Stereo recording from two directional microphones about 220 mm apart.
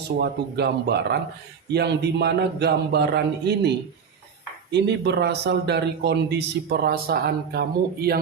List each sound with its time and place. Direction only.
0.2 s speech: 50° right (ahead or behind)
4.7 s speech: 50° right (ahead or behind)